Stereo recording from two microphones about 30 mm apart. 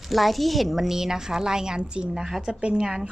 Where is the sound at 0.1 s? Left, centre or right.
Centre.